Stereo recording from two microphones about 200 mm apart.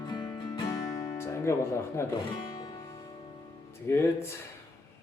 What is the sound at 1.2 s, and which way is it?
Speech, 15° left (ahead or behind).